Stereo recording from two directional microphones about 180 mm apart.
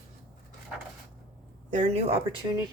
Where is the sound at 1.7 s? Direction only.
40° right (ahead or behind).